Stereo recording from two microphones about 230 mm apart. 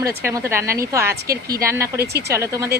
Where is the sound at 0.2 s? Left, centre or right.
Centre.